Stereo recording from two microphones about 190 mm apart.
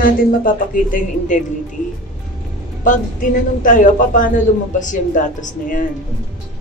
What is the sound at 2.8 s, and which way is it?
A man's voice, 45° left (ahead or behind).